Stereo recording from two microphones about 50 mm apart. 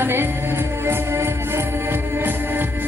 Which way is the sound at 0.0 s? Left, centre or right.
Right.